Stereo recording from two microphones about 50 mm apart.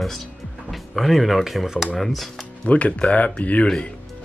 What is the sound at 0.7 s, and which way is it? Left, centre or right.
Speech, centre.